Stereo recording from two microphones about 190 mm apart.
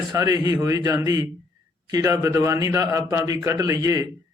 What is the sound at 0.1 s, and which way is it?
A man's voice, 15° right (ahead or behind).